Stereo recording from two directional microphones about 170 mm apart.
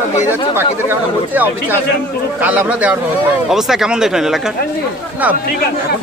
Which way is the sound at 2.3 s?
10° right (ahead or behind).